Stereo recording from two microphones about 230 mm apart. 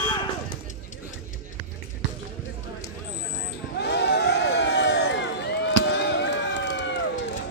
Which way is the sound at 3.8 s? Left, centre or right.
Left.